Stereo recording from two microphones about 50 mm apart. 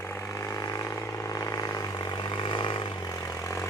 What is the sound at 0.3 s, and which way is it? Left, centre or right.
Vehicle, left.